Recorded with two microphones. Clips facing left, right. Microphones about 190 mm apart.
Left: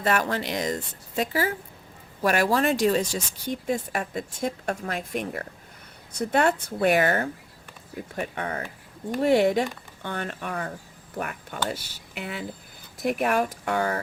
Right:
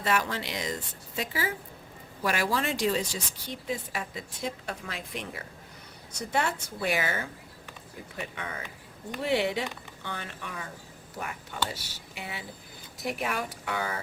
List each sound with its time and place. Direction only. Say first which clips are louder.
0.0 s a woman's voice: left 4 dB; 50° left (ahead or behind)